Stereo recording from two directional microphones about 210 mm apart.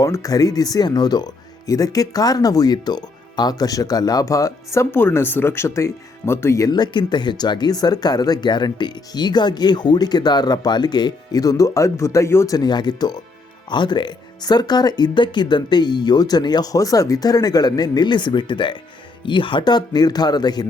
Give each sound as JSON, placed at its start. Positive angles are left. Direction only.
{"t": 0.0, "sound": "speech", "side_deg": 15}